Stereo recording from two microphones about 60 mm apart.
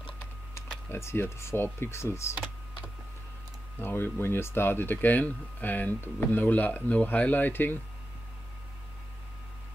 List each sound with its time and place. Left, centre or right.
0.8 s speech: left
3.8 s speech: left